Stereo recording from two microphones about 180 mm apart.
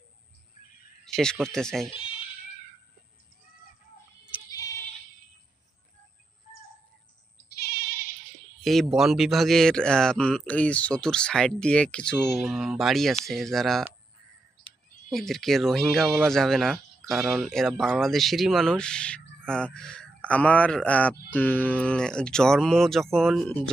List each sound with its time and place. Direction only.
1.0 s speech: 5° left (ahead or behind)
1.9 s speech: 30° left (ahead or behind)
4.3 s goat: 10° right (ahead or behind)
7.6 s sheep: 60° left (ahead or behind)
8.6 s speech: centre (ahead or behind)
15.1 s speech: centre (ahead or behind)